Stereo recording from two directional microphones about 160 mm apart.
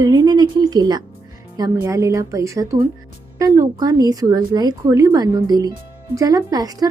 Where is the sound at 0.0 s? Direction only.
25° right (ahead or behind).